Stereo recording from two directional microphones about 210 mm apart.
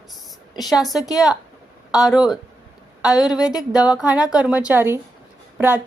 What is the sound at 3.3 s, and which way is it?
Speech, 20° left (ahead or behind).